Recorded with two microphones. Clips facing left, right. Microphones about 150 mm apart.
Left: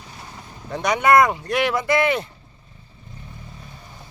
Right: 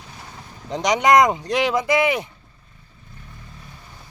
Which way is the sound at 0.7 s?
15° right (ahead or behind).